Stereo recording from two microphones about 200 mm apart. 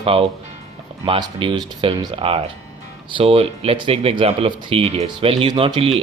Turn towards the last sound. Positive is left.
turn(degrees=-25)  # may be behind; listen again after turning